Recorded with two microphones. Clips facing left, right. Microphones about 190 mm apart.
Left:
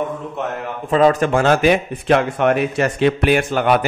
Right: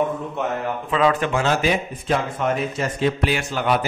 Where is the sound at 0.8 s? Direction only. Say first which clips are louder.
Left 6 dB; 40° left (ahead or behind).